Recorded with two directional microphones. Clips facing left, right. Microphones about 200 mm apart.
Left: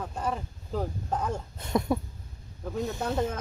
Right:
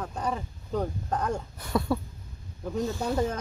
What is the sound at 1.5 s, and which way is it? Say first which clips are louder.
Speech: left 2 dB; 20° left (ahead or behind).